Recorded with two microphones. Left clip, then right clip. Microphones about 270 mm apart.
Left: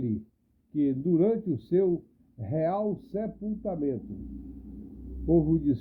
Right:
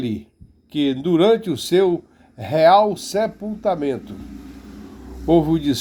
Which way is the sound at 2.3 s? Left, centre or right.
Right.